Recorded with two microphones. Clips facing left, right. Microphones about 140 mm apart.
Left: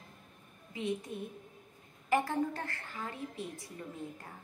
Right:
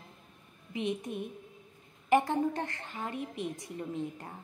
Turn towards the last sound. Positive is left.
turn(degrees=-20)  # may be behind; listen again after turning